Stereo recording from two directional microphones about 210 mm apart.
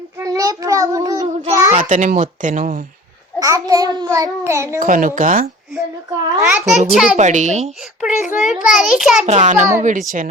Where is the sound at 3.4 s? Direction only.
15° right (ahead or behind).